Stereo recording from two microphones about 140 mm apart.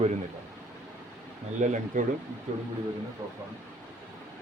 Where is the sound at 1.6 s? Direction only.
60° right (ahead or behind).